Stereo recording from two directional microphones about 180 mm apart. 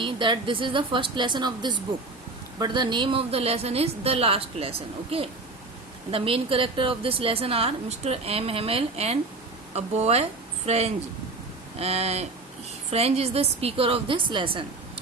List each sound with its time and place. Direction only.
0.0 s a woman's voice: 25° right (ahead or behind)